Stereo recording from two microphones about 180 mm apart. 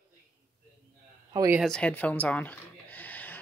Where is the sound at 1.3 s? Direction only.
20° right (ahead or behind).